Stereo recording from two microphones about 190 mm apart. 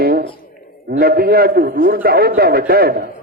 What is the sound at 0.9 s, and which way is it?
A man's voice, 55° right (ahead or behind).